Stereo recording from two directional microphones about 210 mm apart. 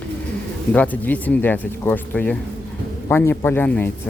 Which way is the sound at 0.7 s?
5° left (ahead or behind).